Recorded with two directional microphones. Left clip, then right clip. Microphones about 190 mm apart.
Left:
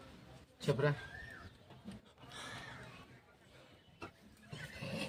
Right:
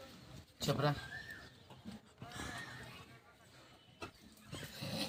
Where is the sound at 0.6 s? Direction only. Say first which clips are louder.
Left 1 dB; 30° left (ahead or behind).